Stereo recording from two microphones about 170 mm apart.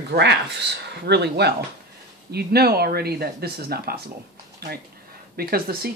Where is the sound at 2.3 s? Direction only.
65° right (ahead or behind).